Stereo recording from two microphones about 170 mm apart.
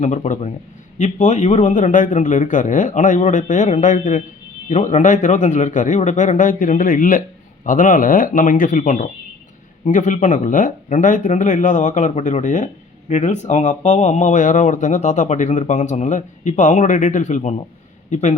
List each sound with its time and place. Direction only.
0.0 s speech: 45° left (ahead or behind)